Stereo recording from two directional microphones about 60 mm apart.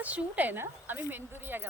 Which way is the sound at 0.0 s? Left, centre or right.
Right.